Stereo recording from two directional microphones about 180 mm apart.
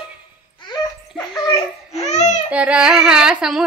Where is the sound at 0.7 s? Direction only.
25° left (ahead or behind).